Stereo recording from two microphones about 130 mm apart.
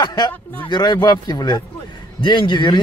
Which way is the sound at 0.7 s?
35° left (ahead or behind).